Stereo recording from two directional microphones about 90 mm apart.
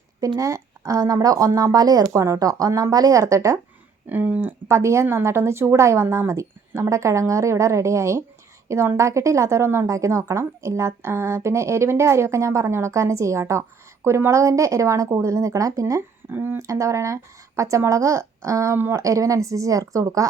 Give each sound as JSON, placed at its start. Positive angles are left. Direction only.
{"t": 0.3, "sound": "a woman's voice", "side_deg": -35}
{"t": 4.1, "sound": "speech", "side_deg": -20}
{"t": 4.7, "sound": "a woman's voice", "side_deg": -30}